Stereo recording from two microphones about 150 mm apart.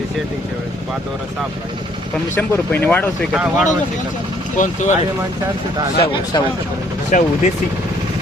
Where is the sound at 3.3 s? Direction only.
5° right (ahead or behind).